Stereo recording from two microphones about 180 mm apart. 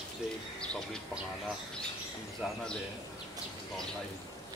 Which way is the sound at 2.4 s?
Centre (ahead or behind).